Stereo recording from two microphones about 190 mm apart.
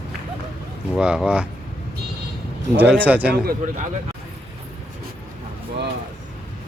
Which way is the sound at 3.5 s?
45° right (ahead or behind).